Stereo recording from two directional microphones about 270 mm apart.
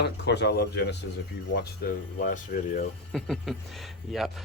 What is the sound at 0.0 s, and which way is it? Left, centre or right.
Speech, left.